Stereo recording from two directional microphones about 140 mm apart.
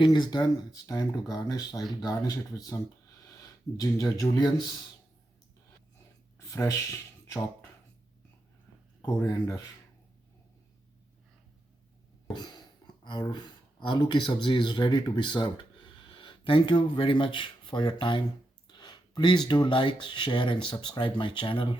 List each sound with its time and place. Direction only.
0.0 s speech: 30° left (ahead or behind)
3.8 s speech: 25° left (ahead or behind)
6.5 s speech: 20° left (ahead or behind)
9.2 s speech: 20° left (ahead or behind)
13.1 s speech: 30° left (ahead or behind)